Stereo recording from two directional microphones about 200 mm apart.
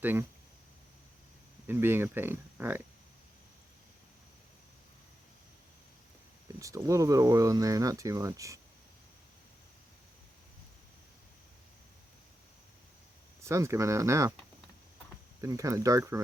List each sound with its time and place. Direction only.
0.0 s speech: 10° right (ahead or behind)
1.6 s speech: 10° right (ahead or behind)
6.6 s speech: 15° right (ahead or behind)
13.4 s speech: 15° right (ahead or behind)
15.4 s speech: 15° right (ahead or behind)